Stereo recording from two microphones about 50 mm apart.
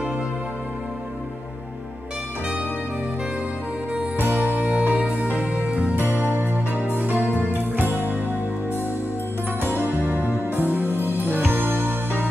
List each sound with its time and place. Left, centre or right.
4.2 s music: right
5.9 s music: right
9.6 s music: right